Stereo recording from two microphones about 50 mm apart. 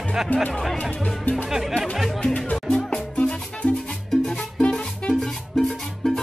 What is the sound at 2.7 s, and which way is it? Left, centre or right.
Music, left.